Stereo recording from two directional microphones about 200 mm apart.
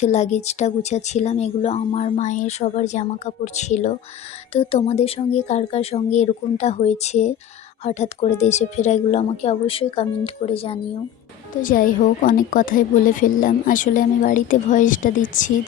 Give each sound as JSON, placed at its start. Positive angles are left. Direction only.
{"t": 0.0, "sound": "a woman's voice", "side_deg": 35}
{"t": 11.6, "sound": "a woman's voice", "side_deg": 45}